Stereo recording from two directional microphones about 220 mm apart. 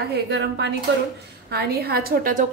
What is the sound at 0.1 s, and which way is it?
A woman's voice, 50° right (ahead or behind).